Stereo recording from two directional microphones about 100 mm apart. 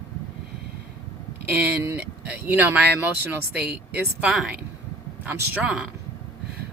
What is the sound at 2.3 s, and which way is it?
Speech, 15° right (ahead or behind).